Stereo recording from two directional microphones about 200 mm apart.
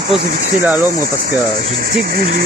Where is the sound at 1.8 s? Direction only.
45° right (ahead or behind).